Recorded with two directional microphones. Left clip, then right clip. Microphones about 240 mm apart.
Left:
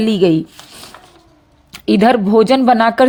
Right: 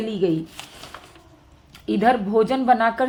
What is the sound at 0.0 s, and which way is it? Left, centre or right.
Speech, left.